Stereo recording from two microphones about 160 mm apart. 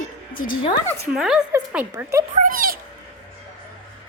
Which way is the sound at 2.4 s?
60° right (ahead or behind).